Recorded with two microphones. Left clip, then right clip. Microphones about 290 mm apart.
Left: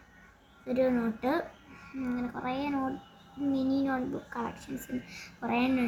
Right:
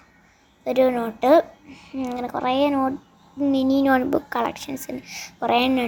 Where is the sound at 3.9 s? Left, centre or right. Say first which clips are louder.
Right 14 dB; right.